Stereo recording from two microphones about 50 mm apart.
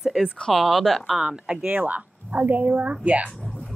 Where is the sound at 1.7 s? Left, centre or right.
Right.